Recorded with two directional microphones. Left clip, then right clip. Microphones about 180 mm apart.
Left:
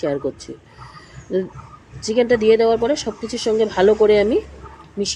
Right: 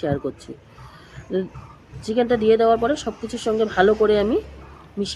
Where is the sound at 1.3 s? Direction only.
5° left (ahead or behind).